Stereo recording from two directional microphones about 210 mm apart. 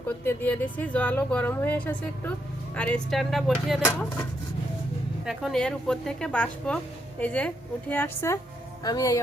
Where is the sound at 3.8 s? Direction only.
10° left (ahead or behind).